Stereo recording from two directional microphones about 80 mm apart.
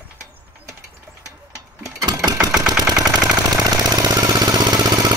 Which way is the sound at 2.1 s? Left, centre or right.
Right.